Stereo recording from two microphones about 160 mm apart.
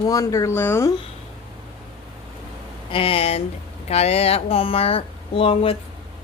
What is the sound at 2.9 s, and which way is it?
Speech, 35° left (ahead or behind).